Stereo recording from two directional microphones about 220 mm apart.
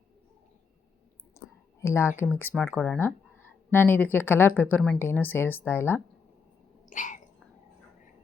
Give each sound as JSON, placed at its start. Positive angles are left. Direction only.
{"t": 1.4, "sound": "clicking", "side_deg": 15}
{"t": 1.8, "sound": "speech", "side_deg": 10}
{"t": 6.9, "sound": "a sound", "side_deg": 35}